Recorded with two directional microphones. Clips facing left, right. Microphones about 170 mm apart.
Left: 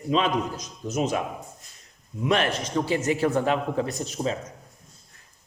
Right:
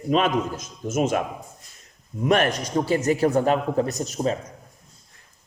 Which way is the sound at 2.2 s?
45° right (ahead or behind).